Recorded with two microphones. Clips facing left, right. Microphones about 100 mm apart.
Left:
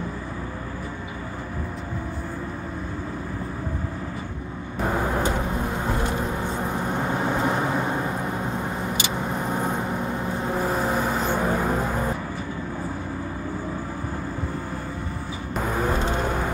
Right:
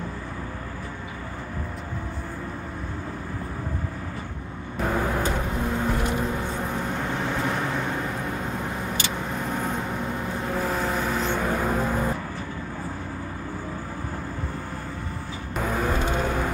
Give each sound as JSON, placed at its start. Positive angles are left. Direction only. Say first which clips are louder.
{"t": 4.8, "sound": "vehicle", "louder": "left 1 dB", "side_deg": 10}
{"t": 15.5, "sound": "music", "louder": "left 1 dB", "side_deg": 5}